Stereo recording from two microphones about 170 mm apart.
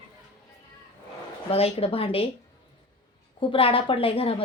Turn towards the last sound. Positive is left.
turn(degrees=35)  # may be behind; listen again after turning